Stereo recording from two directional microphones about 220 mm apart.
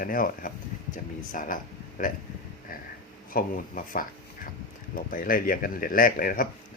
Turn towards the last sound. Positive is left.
turn(degrees=40)  # may be behind; listen again after turning